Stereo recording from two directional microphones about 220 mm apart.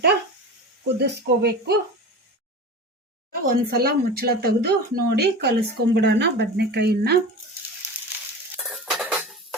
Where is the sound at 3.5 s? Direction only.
45° right (ahead or behind).